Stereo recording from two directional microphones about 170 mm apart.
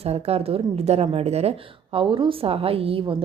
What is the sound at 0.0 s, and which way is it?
A woman's voice, 35° right (ahead or behind).